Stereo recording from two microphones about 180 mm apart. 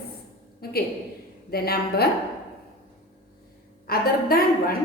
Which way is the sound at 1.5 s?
60° left (ahead or behind).